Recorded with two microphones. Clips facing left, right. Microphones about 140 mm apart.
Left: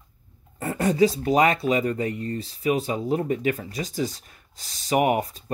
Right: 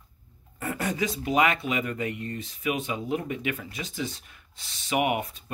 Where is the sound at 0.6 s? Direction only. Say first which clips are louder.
Left 8 dB; 30° left (ahead or behind).